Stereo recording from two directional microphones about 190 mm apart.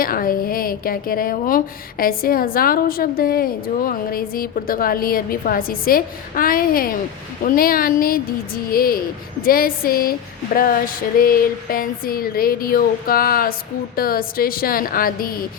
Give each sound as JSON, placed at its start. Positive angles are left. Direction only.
{"t": 0.0, "sound": "speech", "side_deg": 50}